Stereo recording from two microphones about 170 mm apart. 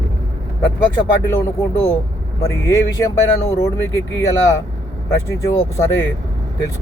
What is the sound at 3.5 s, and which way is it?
Speech, 20° left (ahead or behind).